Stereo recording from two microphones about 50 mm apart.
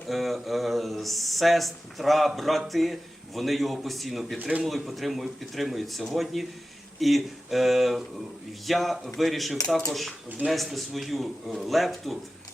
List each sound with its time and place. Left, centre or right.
0.1 s speech: centre